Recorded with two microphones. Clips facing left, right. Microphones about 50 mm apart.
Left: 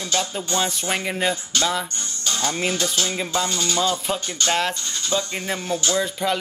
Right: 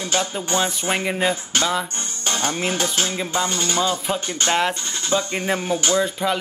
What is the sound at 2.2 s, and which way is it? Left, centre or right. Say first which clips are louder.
Music: right 2 dB; right.